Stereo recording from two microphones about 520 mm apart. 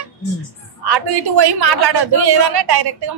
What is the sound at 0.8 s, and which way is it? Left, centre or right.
A man's voice, right.